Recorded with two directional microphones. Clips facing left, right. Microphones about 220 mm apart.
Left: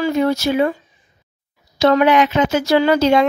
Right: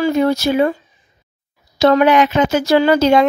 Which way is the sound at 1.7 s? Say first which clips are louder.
Right 2 dB; 40° right (ahead or behind).